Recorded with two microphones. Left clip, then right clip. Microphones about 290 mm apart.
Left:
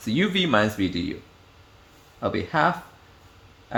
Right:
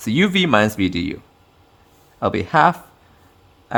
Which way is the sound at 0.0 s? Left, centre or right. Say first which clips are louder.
Right 6 dB; right.